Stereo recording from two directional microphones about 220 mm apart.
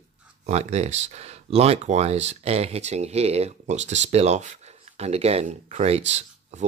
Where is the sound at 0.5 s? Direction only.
30° right (ahead or behind).